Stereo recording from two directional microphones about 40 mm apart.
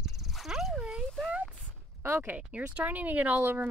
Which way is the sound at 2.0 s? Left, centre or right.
Right.